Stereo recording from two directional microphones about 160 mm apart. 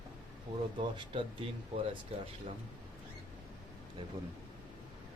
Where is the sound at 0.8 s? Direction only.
30° right (ahead or behind).